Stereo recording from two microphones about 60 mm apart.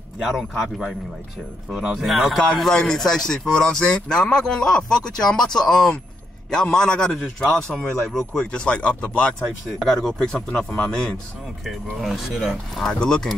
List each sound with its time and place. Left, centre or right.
0.2 s speech: centre
2.0 s speech: centre
9.7 s speech: centre
11.6 s speech: centre
12.7 s speech: centre